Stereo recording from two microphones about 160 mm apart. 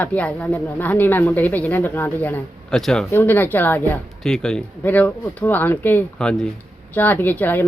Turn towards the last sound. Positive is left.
turn(degrees=10)  # may be behind; listen again after turning